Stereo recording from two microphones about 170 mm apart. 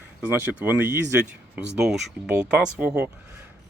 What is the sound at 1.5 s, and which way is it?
Speech, 5° right (ahead or behind).